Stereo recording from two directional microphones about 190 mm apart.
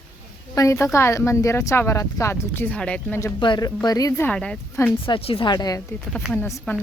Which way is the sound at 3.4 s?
20° left (ahead or behind).